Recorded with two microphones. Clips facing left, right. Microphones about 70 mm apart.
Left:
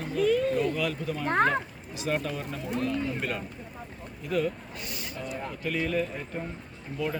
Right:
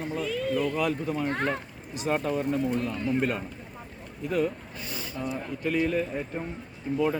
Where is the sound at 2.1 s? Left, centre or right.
Right.